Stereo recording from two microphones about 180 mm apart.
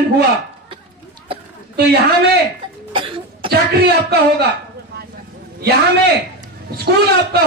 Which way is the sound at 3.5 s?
60° right (ahead or behind).